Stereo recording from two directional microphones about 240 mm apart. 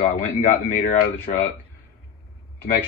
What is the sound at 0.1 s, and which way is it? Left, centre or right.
Speech, left.